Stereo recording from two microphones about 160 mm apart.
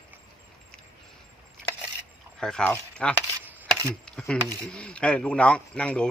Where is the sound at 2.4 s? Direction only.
5° left (ahead or behind).